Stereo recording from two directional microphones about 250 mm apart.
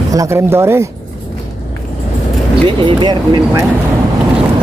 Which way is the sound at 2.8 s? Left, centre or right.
Centre.